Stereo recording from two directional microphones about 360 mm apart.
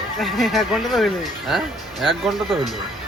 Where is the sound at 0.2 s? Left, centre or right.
Centre.